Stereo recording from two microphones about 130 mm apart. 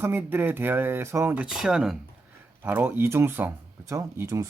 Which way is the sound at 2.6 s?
15° right (ahead or behind).